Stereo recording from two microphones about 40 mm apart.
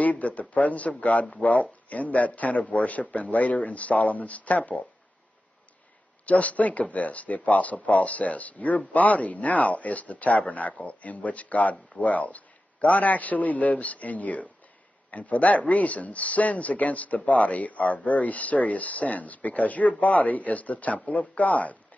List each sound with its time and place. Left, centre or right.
0.0 s speech: left
6.2 s speech: left